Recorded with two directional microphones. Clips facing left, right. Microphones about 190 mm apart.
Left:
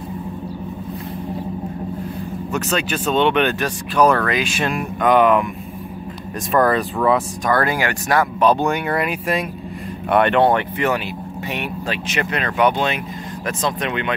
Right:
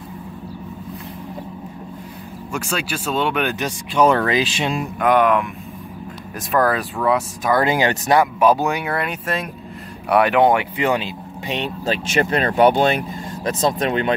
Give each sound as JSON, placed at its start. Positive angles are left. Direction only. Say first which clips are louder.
{"t": 2.5, "sound": "speech", "louder": "left 3 dB", "side_deg": -10}
{"t": 3.5, "sound": "speech", "louder": "left 1 dB", "side_deg": -20}
{"t": 5.0, "sound": "speech", "louder": "left 2 dB", "side_deg": 0}
{"t": 6.5, "sound": "speech", "louder": "left 2 dB", "side_deg": 0}
{"t": 7.5, "sound": "speech", "louder": "right 3 dB", "side_deg": -20}
{"t": 8.4, "sound": "speech", "louder": "even", "side_deg": -5}